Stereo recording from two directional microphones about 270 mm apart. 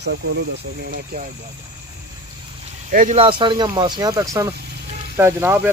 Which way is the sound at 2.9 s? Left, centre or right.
Right.